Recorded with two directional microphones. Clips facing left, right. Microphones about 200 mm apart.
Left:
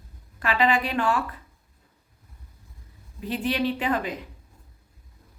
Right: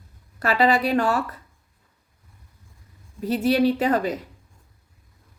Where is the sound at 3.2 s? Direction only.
40° right (ahead or behind).